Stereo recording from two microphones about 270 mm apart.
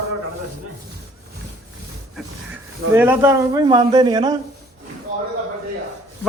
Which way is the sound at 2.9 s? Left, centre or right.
Centre.